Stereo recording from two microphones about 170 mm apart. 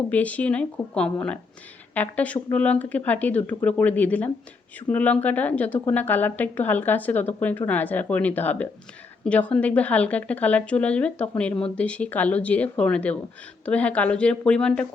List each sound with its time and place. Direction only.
0.1 s a woman's voice: 10° left (ahead or behind)